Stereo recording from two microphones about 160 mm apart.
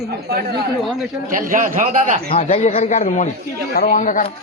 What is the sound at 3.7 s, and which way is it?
Speech, 65° left (ahead or behind).